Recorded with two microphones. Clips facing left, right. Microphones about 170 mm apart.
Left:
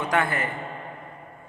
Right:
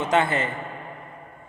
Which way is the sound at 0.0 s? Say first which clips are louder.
Right 3 dB; 25° right (ahead or behind).